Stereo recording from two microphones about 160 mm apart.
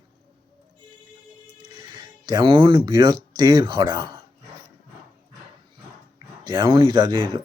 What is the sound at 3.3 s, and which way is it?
Speech, 25° right (ahead or behind).